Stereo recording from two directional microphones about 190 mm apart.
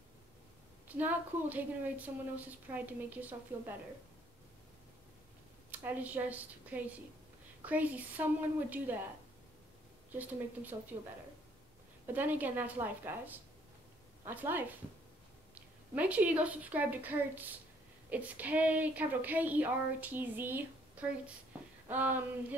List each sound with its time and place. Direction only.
0.8 s a woman's voice: 10° right (ahead or behind)
5.7 s a woman's voice: 10° right (ahead or behind)
10.1 s a woman's voice: 10° right (ahead or behind)
12.1 s a woman's voice: 10° right (ahead or behind)